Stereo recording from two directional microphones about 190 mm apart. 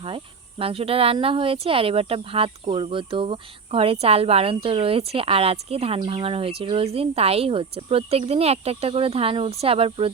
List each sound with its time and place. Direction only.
0.6 s speech: 30° right (ahead or behind)